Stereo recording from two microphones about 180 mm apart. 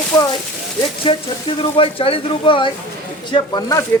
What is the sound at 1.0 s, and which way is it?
Speech, 30° left (ahead or behind).